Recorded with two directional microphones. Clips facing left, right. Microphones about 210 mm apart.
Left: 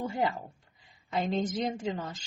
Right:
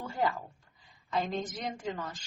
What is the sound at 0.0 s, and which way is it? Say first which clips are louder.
Speech: left 2 dB; 20° left (ahead or behind).